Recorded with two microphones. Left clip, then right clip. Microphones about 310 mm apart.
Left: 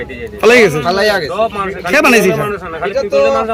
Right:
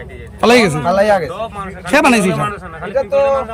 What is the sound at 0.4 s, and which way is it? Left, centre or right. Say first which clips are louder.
Speech: left 3 dB; centre.